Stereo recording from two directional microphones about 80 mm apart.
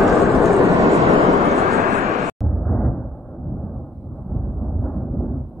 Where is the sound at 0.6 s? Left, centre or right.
Right.